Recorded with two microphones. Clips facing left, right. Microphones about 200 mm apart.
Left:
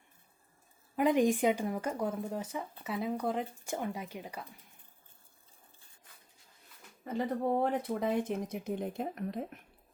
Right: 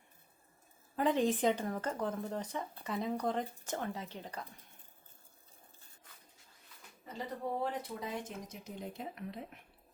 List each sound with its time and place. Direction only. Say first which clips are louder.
0.9 s speech: left 4 dB; 15° left (ahead or behind)
7.6 s speech: left 7 dB; 55° left (ahead or behind)